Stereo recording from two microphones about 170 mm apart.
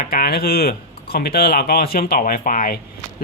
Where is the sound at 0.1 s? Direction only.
65° left (ahead or behind).